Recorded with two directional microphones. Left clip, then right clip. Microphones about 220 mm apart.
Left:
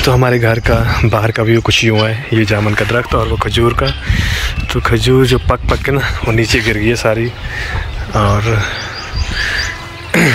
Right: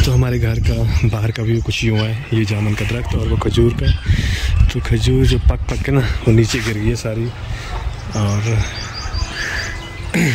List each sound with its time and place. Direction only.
0.0 s speech: 5° right (ahead or behind)
8.1 s speech: 5° right (ahead or behind)
10.1 s speech: 5° right (ahead or behind)